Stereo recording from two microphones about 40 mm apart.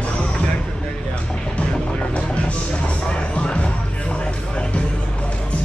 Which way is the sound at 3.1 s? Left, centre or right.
Left.